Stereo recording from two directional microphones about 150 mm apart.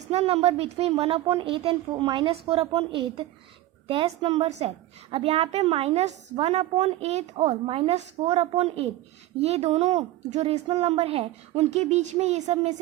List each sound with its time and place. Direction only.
0.1 s a woman's voice: 45° right (ahead or behind)